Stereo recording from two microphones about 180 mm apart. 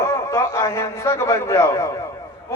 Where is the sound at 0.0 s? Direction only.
15° left (ahead or behind).